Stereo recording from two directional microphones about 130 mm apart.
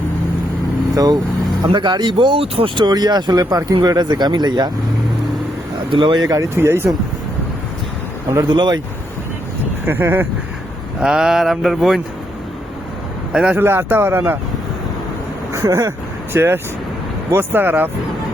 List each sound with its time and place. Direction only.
0.9 s speech: 30° right (ahead or behind)
5.9 s speech: 35° right (ahead or behind); by 6.9 s 20° right (ahead or behind)
8.3 s speech: 30° right (ahead or behind)
9.8 s speech: 20° right (ahead or behind)
11.0 s mantra: 5° right (ahead or behind)
13.3 s speech: 10° right (ahead or behind)
15.5 s speech: 25° right (ahead or behind)